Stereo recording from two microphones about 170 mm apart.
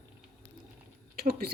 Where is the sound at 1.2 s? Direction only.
60° right (ahead or behind).